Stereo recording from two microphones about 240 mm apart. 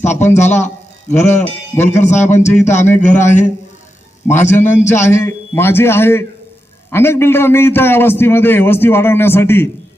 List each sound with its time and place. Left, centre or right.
0.0 s a man's voice: left
2.5 s a man's voice: centre
3.0 s a man's voice: left
4.5 s a man's voice: centre